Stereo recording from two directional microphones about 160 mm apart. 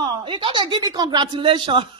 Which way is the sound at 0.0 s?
30° right (ahead or behind).